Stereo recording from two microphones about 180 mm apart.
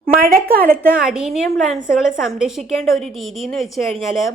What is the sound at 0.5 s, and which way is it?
Speech, 55° right (ahead or behind).